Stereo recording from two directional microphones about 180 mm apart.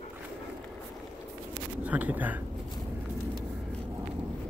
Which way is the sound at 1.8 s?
10° right (ahead or behind).